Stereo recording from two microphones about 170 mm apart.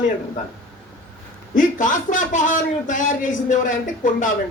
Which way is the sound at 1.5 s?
50° left (ahead or behind).